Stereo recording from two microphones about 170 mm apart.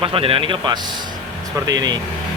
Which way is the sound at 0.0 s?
30° right (ahead or behind).